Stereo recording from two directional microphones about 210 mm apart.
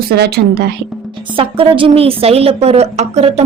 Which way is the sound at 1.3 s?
25° right (ahead or behind).